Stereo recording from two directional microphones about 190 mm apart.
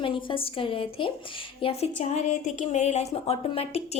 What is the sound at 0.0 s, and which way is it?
A woman's voice, 25° left (ahead or behind).